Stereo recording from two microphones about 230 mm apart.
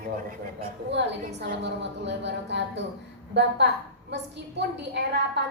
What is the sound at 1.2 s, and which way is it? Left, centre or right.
A woman's voice, right.